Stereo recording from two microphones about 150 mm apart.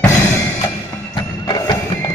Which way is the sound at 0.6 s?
30° left (ahead or behind).